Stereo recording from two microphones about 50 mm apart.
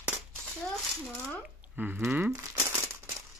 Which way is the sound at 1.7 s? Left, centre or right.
Centre.